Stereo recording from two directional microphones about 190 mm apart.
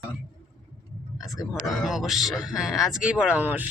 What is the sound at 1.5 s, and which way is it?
Speech, centre (ahead or behind).